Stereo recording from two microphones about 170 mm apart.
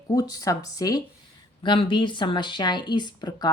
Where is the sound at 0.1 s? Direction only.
20° left (ahead or behind).